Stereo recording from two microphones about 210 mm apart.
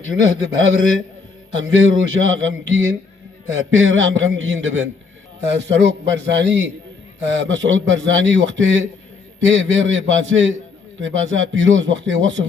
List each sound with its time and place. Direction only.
0.3 s a man's voice: 65° right (ahead or behind)